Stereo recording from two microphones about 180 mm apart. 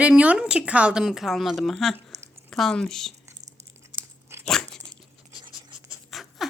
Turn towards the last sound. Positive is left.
turn(degrees=0)  # may be behind; listen again after turning